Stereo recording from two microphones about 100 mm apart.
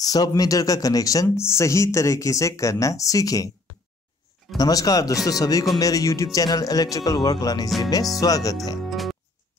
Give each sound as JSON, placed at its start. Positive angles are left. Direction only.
{"t": 0.0, "sound": "speech", "side_deg": 40}
{"t": 4.6, "sound": "speech", "side_deg": 35}
{"t": 8.7, "sound": "music", "side_deg": 0}